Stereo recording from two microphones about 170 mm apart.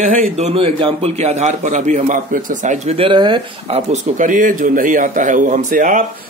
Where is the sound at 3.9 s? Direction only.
50° right (ahead or behind).